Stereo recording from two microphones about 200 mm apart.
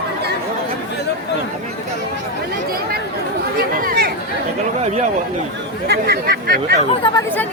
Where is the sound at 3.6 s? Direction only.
45° right (ahead or behind).